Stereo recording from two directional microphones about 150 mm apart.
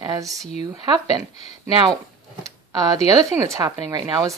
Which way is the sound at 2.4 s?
25° right (ahead or behind).